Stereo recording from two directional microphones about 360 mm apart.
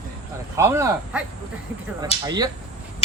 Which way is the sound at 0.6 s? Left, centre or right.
Centre.